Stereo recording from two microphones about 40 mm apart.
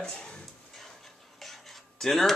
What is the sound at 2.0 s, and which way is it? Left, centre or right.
Speech, centre.